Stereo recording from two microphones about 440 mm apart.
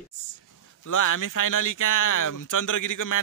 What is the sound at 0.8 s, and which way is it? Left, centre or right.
Speech, left.